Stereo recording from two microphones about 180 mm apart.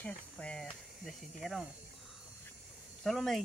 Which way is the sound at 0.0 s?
5° left (ahead or behind).